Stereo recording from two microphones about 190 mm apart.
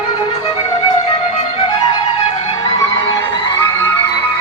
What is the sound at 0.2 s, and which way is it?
Music, 25° left (ahead or behind).